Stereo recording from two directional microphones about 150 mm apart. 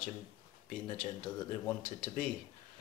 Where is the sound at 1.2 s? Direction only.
15° left (ahead or behind).